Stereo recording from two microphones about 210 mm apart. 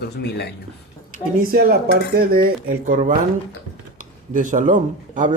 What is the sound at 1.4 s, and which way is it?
Speech, 45° right (ahead or behind).